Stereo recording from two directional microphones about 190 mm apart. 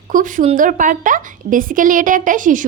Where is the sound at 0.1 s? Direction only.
45° right (ahead or behind).